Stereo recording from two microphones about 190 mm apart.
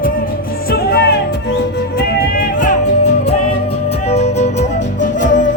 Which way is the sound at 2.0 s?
45° left (ahead or behind).